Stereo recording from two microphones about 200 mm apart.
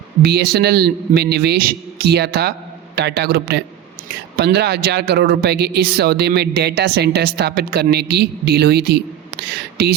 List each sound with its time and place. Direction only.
0.2 s a man's voice: 50° right (ahead or behind)